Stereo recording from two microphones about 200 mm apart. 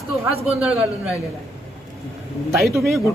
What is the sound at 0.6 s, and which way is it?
Speech, 5° right (ahead or behind).